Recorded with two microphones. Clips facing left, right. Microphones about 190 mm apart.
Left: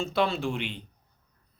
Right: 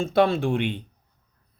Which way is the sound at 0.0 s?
50° right (ahead or behind).